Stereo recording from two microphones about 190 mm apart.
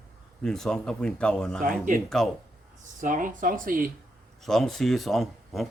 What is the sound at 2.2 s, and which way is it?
Speech, centre (ahead or behind).